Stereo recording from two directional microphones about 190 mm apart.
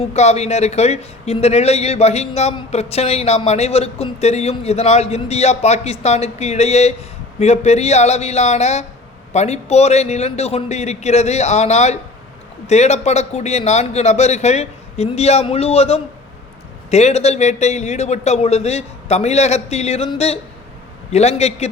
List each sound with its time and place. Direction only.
0.0 s a man's voice: 35° left (ahead or behind)